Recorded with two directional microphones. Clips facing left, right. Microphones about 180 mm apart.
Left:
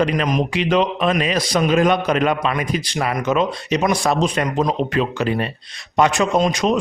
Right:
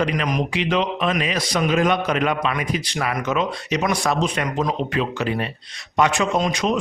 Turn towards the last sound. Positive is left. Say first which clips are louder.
# left 3 dB
turn(degrees=40)  # may be behind; listen again after turning